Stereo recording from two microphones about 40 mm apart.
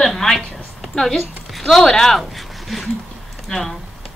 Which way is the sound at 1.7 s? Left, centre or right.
Centre.